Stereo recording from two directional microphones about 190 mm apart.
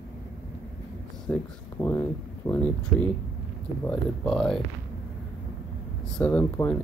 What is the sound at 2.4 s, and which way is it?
Speech, 15° left (ahead or behind).